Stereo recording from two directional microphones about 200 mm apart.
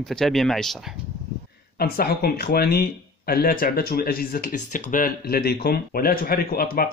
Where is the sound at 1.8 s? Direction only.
50° left (ahead or behind).